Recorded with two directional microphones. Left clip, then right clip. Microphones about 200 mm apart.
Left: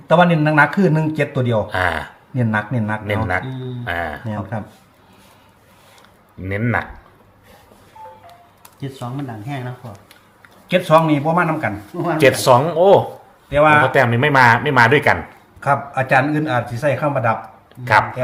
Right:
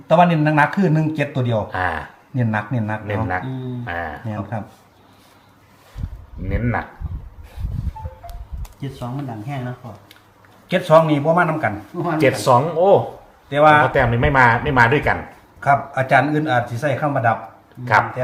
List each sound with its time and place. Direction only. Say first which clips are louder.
0.1 s a man's voice: left 1 dB; centre (ahead or behind)
1.7 s speech: left 3 dB; 55° left (ahead or behind)
2.3 s a man's voice: left 2 dB; centre (ahead or behind)
3.1 s speech: left 3 dB; 50° left (ahead or behind)
4.3 s a man's voice: left 1 dB; centre (ahead or behind)
6.5 s speech: left 3 dB; 50° left (ahead or behind)
10.7 s a man's voice: even; 10° right (ahead or behind)
12.0 s speech: left 3 dB; 50° left (ahead or behind)
13.5 s a man's voice: even; 10° right (ahead or behind)
13.8 s speech: left 2 dB; 50° left (ahead or behind)
16.0 s a man's voice: even; 10° right (ahead or behind)